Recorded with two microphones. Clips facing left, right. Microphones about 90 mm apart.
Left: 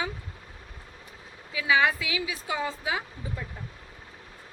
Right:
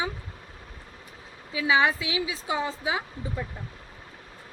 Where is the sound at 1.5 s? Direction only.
25° right (ahead or behind).